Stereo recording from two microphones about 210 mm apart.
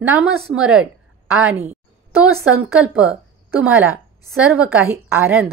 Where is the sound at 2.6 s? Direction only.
5° right (ahead or behind).